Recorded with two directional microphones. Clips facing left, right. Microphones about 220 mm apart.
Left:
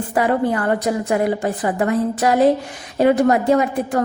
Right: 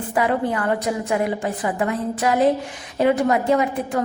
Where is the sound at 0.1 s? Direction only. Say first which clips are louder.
Left 3 dB; 40° left (ahead or behind).